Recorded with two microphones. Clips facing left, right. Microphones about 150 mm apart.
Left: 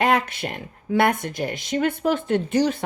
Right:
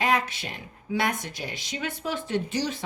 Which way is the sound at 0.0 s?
60° left (ahead or behind).